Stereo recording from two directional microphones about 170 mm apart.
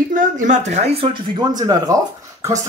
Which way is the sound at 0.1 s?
50° right (ahead or behind).